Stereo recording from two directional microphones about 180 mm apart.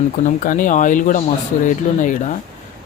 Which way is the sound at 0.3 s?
45° left (ahead or behind).